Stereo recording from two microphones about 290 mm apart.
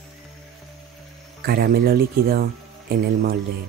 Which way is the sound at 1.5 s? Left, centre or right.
Right.